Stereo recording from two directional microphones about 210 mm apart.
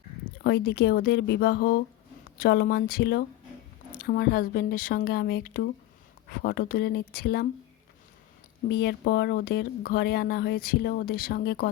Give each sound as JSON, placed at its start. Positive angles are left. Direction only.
{"t": 0.4, "sound": "speech", "side_deg": 50}
{"t": 8.6, "sound": "speech", "side_deg": 50}